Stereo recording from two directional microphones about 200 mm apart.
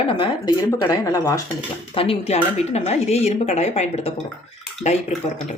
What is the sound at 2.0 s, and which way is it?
Speech, 30° left (ahead or behind).